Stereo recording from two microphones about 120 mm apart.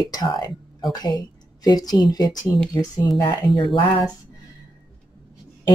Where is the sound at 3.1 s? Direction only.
40° left (ahead or behind).